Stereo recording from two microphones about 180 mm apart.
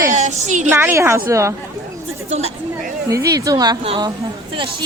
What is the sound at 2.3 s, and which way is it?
Speech, 35° right (ahead or behind).